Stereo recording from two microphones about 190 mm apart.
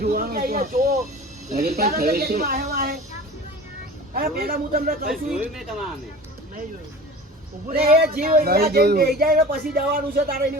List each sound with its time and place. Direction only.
0.0 s snake: 50° right (ahead or behind)
1.5 s speech: 55° right (ahead or behind)
4.1 s speech: 50° right (ahead or behind)
5.0 s speech: centre (ahead or behind)
7.8 s speech: 50° right (ahead or behind)